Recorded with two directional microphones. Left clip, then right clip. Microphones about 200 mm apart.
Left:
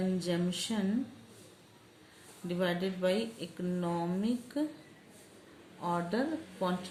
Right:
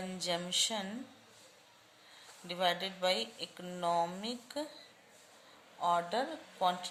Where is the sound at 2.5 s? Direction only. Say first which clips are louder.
Even; 40° right (ahead or behind).